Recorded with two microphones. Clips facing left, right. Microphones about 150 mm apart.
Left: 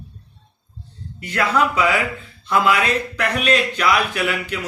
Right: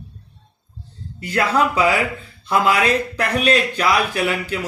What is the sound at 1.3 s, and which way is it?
Speech, 35° right (ahead or behind).